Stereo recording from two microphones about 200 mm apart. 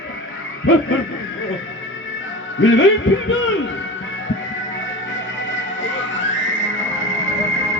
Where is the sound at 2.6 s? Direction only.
75° left (ahead or behind).